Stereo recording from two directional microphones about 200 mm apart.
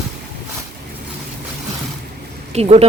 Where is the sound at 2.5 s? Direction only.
30° right (ahead or behind).